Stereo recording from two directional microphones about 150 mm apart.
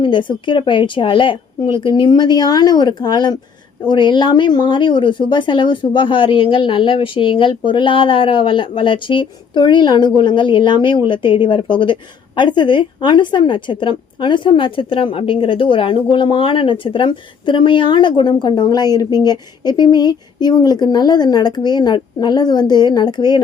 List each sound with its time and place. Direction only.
0.0 s a woman's voice: 35° left (ahead or behind)